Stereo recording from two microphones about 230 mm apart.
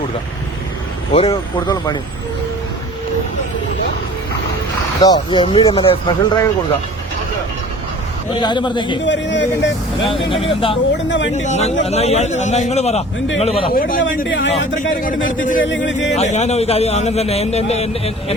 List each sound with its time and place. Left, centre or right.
1.1 s speech: left
4.9 s a man's voice: centre
8.3 s a man's voice: left
9.0 s speech: left
10.0 s a man's voice: left
10.9 s speech: left
11.3 s a man's voice: left
13.7 s a man's voice: left
14.3 s speech: left
15.6 s speech: left
16.1 s a man's voice: left